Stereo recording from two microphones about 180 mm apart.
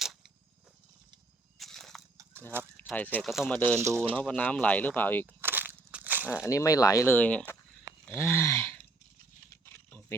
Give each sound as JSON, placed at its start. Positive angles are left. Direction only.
{"t": 0.0, "sound": "a sound", "side_deg": 0}
{"t": 1.5, "sound": "a sound", "side_deg": 0}
{"t": 2.9, "sound": "speech", "side_deg": 10}
{"t": 3.8, "sound": "speech", "side_deg": -15}
{"t": 4.1, "sound": "speech", "side_deg": 5}
{"t": 5.2, "sound": "crushing", "side_deg": -10}
{"t": 6.4, "sound": "speech", "side_deg": 15}
{"t": 8.0, "sound": "a sound", "side_deg": 15}
{"t": 9.6, "sound": "typing", "side_deg": 15}